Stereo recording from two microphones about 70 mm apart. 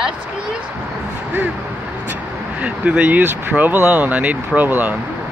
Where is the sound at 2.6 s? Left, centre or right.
Centre.